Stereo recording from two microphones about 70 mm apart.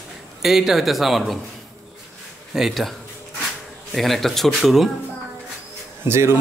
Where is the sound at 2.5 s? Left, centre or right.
Centre.